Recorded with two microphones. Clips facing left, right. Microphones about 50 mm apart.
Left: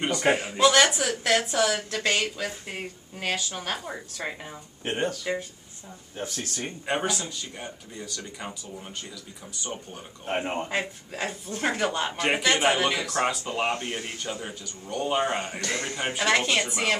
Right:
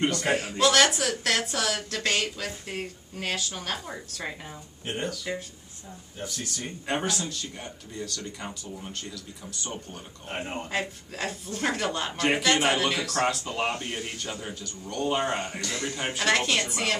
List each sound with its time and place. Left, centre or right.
0.2 s speech: left
4.8 s speech: left
6.9 s speech: centre
10.2 s speech: left
13.7 s speech: left
14.1 s speech: centre
15.6 s speech: left
16.0 s speech: centre